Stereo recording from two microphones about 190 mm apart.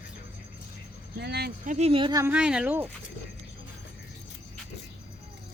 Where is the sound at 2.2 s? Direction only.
5° right (ahead or behind).